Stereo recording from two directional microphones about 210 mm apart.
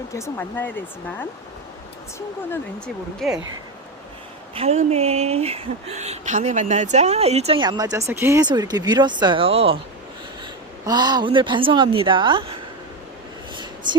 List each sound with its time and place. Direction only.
0.1 s speech: 10° left (ahead or behind)
4.5 s speech: 30° right (ahead or behind)
10.8 s speech: 20° right (ahead or behind)